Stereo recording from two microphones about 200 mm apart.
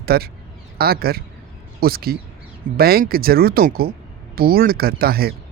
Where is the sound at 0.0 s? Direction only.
50° right (ahead or behind).